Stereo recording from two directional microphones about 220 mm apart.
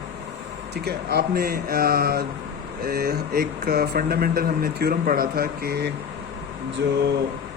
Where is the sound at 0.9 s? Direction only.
45° right (ahead or behind).